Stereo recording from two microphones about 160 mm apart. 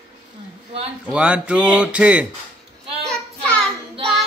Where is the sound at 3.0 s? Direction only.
10° left (ahead or behind).